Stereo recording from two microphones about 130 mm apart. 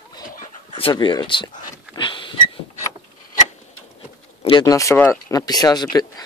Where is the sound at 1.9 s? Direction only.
40° left (ahead or behind).